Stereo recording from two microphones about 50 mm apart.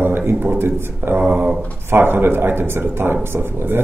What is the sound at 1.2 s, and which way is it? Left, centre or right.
Speech, right.